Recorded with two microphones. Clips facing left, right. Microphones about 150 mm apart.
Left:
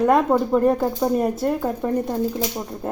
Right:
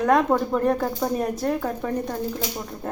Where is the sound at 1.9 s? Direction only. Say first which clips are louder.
Left 4 dB; 20° left (ahead or behind).